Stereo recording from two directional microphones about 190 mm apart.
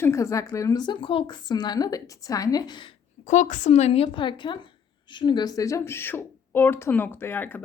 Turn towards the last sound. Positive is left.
turn(degrees=10)  # may be behind; listen again after turning